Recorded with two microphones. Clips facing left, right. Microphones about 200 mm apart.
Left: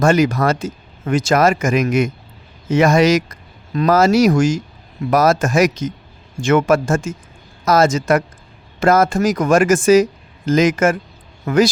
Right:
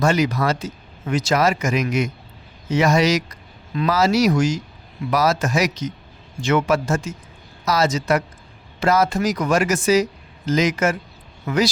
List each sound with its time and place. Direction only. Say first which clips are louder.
0.0 s speech: left 5 dB; 50° left (ahead or behind)